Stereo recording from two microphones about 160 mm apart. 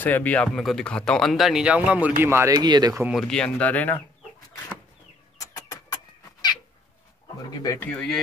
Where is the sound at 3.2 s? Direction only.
5° left (ahead or behind).